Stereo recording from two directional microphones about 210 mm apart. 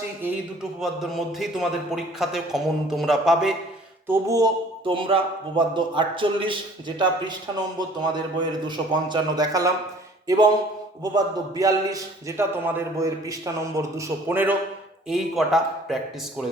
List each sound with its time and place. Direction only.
0.8 s a man's voice: centre (ahead or behind)
4.1 s a man's voice: 15° right (ahead or behind); by 16.0 s centre (ahead or behind)